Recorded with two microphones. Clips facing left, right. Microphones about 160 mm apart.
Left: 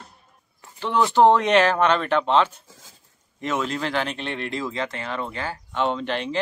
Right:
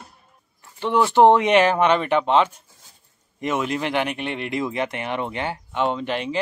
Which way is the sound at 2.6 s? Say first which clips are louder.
Left 6 dB; 90° left.